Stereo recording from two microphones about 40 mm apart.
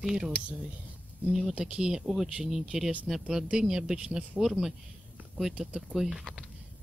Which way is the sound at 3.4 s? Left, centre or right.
Right.